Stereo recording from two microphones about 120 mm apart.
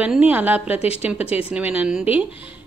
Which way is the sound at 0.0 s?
10° right (ahead or behind).